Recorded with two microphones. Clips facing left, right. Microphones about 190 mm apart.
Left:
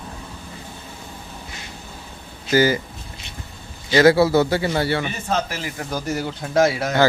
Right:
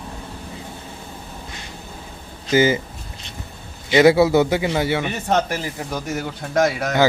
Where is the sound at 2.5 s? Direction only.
20° right (ahead or behind).